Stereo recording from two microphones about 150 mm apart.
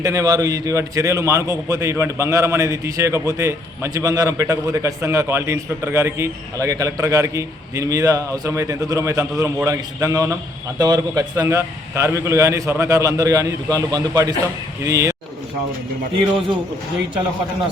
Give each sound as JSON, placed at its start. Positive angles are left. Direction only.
{"t": 0.0, "sound": "a man's voice", "side_deg": -25}